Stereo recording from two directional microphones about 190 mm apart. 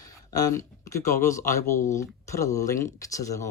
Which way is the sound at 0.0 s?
20° left (ahead or behind).